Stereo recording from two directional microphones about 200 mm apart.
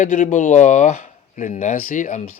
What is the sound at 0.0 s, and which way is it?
Speech, 35° left (ahead or behind).